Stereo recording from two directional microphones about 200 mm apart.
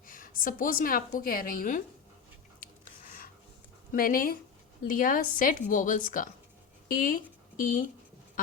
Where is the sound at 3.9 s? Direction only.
45° left (ahead or behind).